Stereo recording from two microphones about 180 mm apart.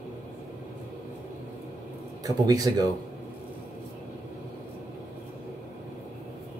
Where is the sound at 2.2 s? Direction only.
20° right (ahead or behind).